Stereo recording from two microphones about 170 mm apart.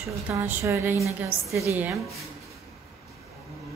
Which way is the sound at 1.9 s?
Centre (ahead or behind).